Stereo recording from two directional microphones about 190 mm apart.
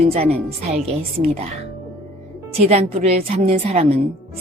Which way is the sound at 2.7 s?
35° right (ahead or behind).